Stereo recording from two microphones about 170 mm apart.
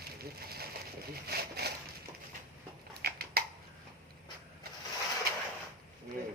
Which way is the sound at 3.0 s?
60° right (ahead or behind).